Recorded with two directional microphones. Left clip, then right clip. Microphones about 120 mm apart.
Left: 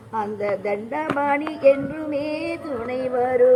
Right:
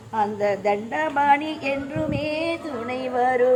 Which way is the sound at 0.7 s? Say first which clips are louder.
Right 2 dB; 25° right (ahead or behind).